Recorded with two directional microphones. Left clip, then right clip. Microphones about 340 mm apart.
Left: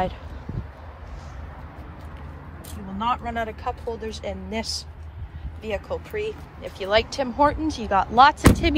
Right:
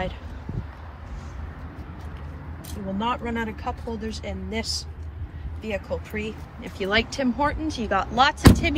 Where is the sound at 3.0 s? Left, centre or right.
Centre.